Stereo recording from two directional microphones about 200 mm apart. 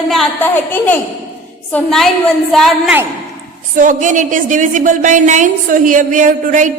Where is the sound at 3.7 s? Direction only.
40° right (ahead or behind).